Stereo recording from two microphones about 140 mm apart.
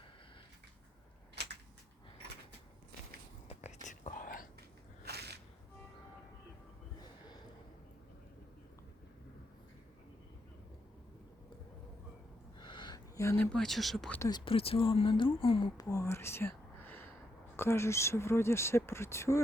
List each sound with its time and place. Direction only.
3.5 s whispering: 55° left (ahead or behind); by 4.4 s 80° left
12.5 s a sound: 35° left (ahead or behind)
13.1 s speech: 15° left (ahead or behind); by 14.1 s centre (ahead or behind)
14.3 s speech: 35° left (ahead or behind)
15.8 s speech: 20° left (ahead or behind)